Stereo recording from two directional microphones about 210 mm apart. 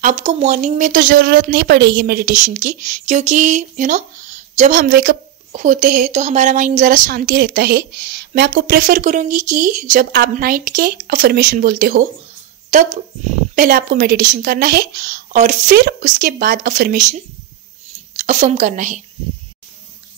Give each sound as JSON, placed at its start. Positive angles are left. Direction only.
{"t": 0.0, "sound": "a woman's voice", "side_deg": -35}
{"t": 13.6, "sound": "a woman's voice", "side_deg": -40}
{"t": 18.1, "sound": "a woman's voice", "side_deg": -35}